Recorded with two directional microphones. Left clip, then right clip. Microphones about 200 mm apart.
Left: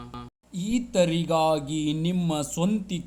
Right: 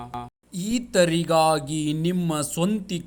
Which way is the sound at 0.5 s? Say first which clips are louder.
Right 3 dB; 35° right (ahead or behind).